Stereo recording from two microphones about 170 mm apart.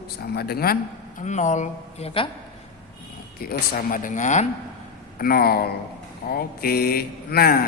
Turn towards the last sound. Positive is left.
turn(degrees=65)  # may be behind; listen again after turning